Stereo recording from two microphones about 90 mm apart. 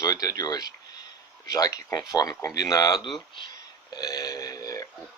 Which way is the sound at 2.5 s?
45° left (ahead or behind).